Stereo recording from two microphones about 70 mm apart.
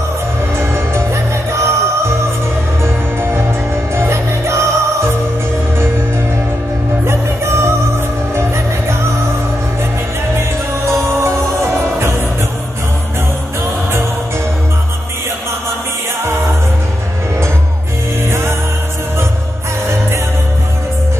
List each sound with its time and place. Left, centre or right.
0.6 s music: right
7.1 s music: right
10.9 s music: right